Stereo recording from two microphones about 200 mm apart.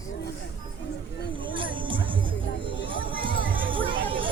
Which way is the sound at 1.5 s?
25° right (ahead or behind).